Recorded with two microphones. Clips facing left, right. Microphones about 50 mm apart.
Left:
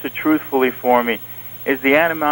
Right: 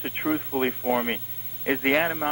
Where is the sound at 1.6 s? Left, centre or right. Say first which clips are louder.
Left 8 dB; left.